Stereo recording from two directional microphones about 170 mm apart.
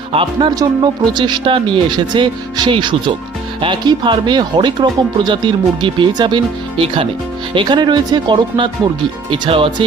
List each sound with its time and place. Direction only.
0.1 s speech: 30° right (ahead or behind)